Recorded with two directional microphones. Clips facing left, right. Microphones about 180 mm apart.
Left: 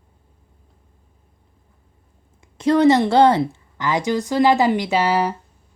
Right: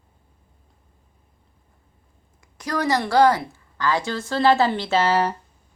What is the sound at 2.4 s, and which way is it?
Speech, 25° left (ahead or behind).